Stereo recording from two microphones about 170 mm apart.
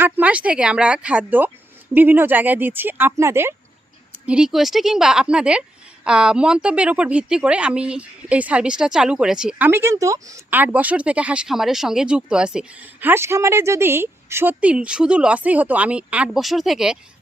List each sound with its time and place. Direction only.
0.0 s a woman's voice: 10° right (ahead or behind)
4.3 s a woman's voice: 5° right (ahead or behind)